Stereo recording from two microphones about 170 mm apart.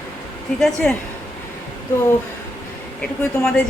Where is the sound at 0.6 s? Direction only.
Centre (ahead or behind).